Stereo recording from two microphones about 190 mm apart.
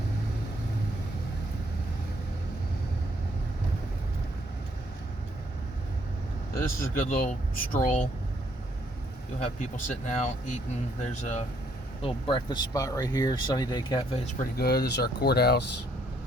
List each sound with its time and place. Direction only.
6.7 s speech: 45° left (ahead or behind)
9.4 s speech: 40° left (ahead or behind)
12.0 s speech: 25° left (ahead or behind)
14.3 s speech: 55° left (ahead or behind)